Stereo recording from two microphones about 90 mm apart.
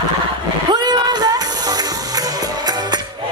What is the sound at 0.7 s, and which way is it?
Music, 50° right (ahead or behind).